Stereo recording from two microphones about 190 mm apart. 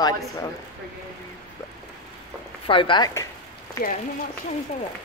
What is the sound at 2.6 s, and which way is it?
Speech, 25° left (ahead or behind).